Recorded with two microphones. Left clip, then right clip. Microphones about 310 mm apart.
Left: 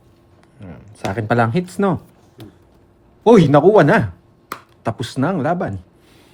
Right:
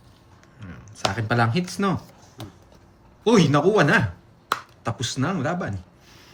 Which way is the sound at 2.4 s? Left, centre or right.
Centre.